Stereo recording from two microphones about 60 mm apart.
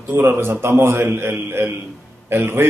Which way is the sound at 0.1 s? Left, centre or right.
Right.